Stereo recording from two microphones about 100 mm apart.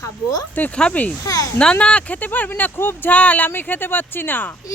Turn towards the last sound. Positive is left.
turn(degrees=20)  # may be behind; listen again after turning